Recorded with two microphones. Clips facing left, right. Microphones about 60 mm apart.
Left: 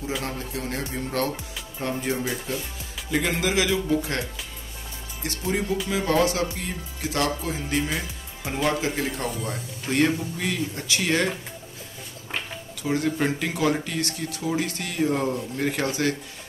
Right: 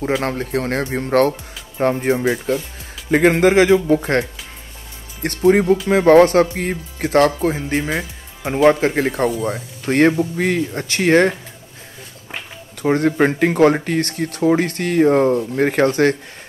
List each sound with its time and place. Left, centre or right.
0.0 s speech: right
12.8 s speech: right